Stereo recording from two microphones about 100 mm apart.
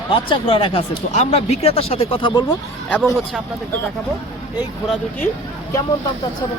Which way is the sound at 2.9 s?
5° left (ahead or behind).